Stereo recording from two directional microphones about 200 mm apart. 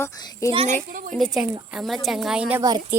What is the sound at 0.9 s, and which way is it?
Speech, 40° right (ahead or behind).